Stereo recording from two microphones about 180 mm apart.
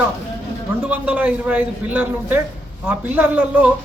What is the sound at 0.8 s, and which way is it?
A man's voice, 10° right (ahead or behind).